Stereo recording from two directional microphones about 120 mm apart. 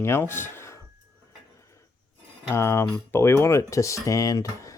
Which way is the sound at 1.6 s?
25° left (ahead or behind).